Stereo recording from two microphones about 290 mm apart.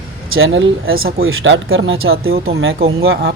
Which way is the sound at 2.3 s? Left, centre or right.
Right.